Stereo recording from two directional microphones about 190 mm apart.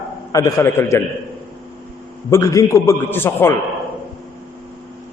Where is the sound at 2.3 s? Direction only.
15° left (ahead or behind).